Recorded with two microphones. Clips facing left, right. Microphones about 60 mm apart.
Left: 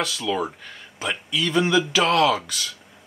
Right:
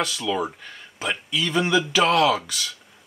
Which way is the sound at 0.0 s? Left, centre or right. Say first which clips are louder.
Even; centre.